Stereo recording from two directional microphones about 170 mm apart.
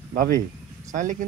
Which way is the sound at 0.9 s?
45° right (ahead or behind).